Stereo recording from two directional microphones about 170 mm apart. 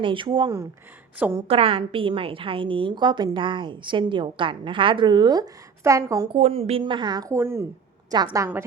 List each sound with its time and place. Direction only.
0.0 s a woman's voice: 30° right (ahead or behind)
1.5 s a woman's voice: 35° right (ahead or behind)
6.3 s a woman's voice: 35° right (ahead or behind); by 8.6 s 15° right (ahead or behind)